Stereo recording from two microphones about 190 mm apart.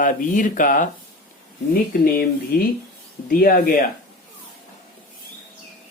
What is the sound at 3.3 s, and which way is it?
Speech, 50° left (ahead or behind).